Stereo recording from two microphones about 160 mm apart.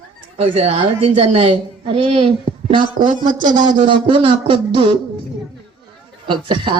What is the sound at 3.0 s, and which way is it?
Speech, 60° right (ahead or behind).